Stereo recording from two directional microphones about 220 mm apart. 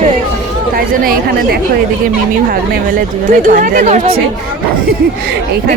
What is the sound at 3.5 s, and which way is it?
Speech, 35° right (ahead or behind).